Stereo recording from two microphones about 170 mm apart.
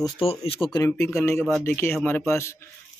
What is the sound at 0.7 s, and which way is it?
Speech, 15° left (ahead or behind).